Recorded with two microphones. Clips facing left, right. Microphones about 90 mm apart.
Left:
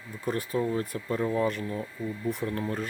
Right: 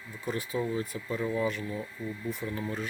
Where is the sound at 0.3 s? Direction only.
45° left (ahead or behind).